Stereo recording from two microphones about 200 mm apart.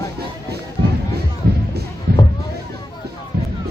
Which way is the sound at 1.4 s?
50° right (ahead or behind).